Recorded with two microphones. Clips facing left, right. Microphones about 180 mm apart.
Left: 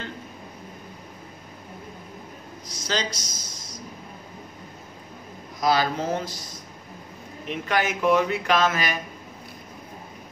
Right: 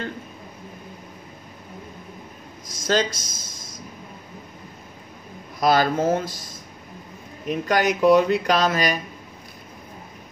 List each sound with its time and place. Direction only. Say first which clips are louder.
2.8 s a sound: right 7 dB; 50° right (ahead or behind)
5.6 s speech: right 4 dB; 50° right (ahead or behind)
7.4 s speech: right 4 dB; 40° right (ahead or behind)